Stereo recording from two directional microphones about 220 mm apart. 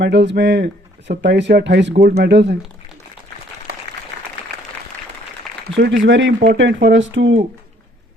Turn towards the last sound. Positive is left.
turn(degrees=-55)  # may be behind; listen again after turning